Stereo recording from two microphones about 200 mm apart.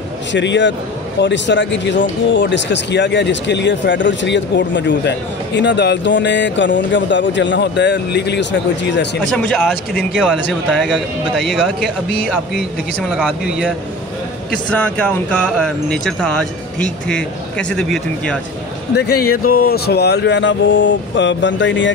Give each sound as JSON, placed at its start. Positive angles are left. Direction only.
{"t": 0.3, "sound": "speech", "side_deg": 65}
{"t": 9.2, "sound": "speech", "side_deg": 5}
{"t": 18.9, "sound": "speech", "side_deg": 50}